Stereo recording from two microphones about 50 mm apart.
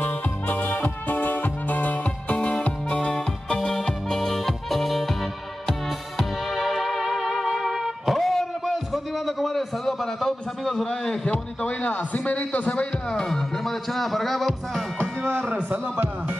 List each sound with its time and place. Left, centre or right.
0.0 s music: left
3.1 s music: centre
8.2 s a sound: centre
11.2 s a man's voice: left
13.1 s music: centre
15.2 s a man's voice: right